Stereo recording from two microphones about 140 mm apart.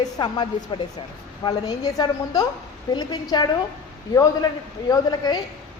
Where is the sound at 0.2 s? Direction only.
30° left (ahead or behind).